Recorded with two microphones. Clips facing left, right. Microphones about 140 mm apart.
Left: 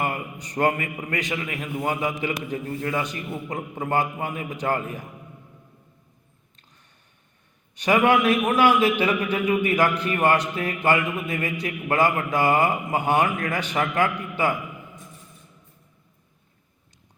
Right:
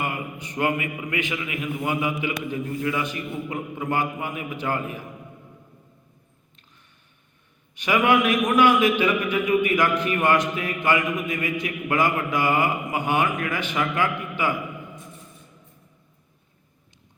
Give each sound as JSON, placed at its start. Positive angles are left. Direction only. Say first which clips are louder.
{"t": 0.0, "sound": "a man's voice", "louder": "left 1 dB", "side_deg": 40}
{"t": 7.8, "sound": "a man's voice", "louder": "left 1 dB", "side_deg": 35}